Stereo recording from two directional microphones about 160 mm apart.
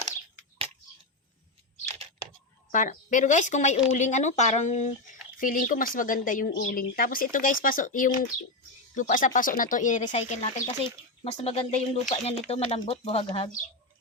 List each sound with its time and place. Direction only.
2.7 s speech: 55° left (ahead or behind)
5.4 s speech: 60° left (ahead or behind); by 13.5 s 35° left (ahead or behind)